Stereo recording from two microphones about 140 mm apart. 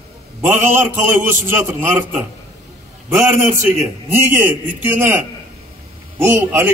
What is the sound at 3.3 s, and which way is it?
A man's voice, 15° right (ahead or behind).